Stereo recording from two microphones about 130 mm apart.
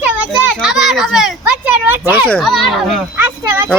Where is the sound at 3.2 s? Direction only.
15° right (ahead or behind).